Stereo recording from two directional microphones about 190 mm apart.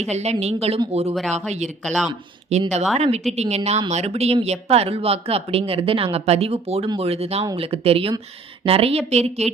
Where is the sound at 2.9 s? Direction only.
35° right (ahead or behind).